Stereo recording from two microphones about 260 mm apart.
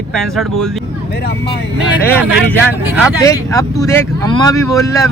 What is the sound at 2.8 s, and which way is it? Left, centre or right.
Speech, centre.